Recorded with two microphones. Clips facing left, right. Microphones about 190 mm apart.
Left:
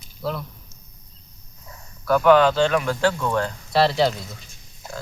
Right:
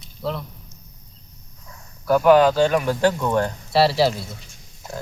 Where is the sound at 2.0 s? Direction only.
10° right (ahead or behind).